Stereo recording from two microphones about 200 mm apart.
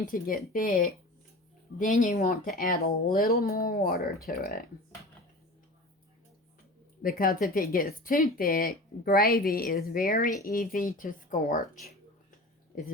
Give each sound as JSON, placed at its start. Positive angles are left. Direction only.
{"t": 0.1, "sound": "speech", "side_deg": 45}
{"t": 7.0, "sound": "speech", "side_deg": 45}